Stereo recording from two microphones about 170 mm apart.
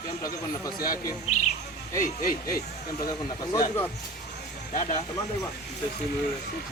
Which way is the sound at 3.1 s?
20° left (ahead or behind).